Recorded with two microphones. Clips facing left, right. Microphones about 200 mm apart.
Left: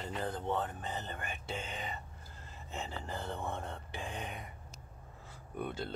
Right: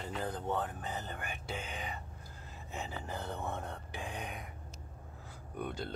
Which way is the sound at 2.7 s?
Centre (ahead or behind).